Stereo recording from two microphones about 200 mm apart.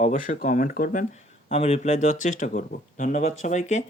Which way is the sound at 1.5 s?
30° left (ahead or behind).